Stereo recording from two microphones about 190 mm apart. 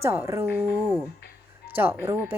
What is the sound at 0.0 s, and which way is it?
Speech, 15° right (ahead or behind).